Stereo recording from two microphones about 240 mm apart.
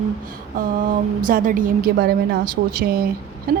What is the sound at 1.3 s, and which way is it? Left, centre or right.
A woman's voice, right.